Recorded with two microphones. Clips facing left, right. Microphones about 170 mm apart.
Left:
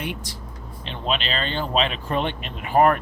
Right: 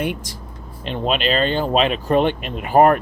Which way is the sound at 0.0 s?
45° right (ahead or behind).